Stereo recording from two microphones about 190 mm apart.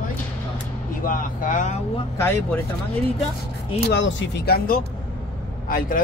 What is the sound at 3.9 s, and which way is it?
Speech, 65° left (ahead or behind).